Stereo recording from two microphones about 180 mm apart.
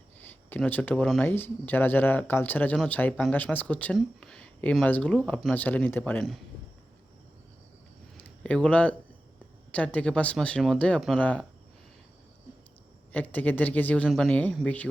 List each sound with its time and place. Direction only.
0.2 s speech: 10° left (ahead or behind)
8.2 s speech: 5° left (ahead or behind)
13.1 s speech: 10° left (ahead or behind)